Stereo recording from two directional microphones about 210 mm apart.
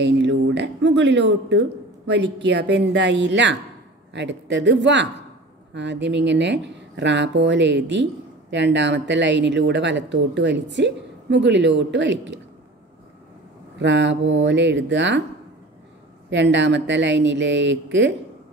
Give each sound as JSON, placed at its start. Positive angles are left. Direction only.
{"t": 0.0, "sound": "speech", "side_deg": -55}
{"t": 13.7, "sound": "speech", "side_deg": -60}
{"t": 16.3, "sound": "speech", "side_deg": -60}